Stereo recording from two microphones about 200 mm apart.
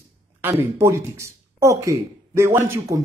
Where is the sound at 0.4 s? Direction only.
10° right (ahead or behind).